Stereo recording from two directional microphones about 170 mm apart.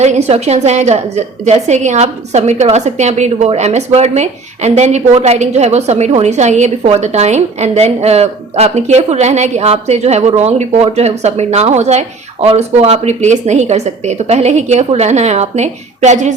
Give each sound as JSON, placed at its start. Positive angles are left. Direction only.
{"t": 0.0, "sound": "a woman's voice", "side_deg": -40}